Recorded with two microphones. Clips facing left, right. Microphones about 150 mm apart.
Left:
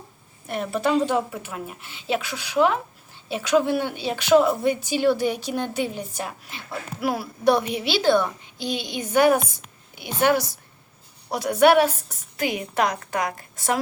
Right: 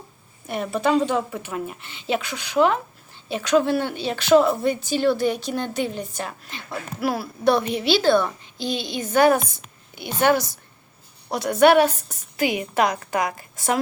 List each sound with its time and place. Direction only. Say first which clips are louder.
0.4 s a woman's voice: right 1 dB; centre (ahead or behind)